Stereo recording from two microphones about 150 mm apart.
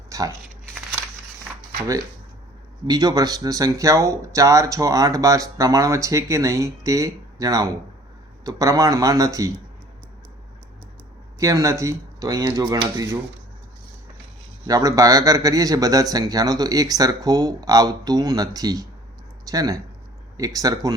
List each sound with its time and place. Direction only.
0.1 s a sound: 20° right (ahead or behind)
2.8 s speech: 30° right (ahead or behind)
11.3 s speech: 20° right (ahead or behind)
14.7 s speech: 25° right (ahead or behind)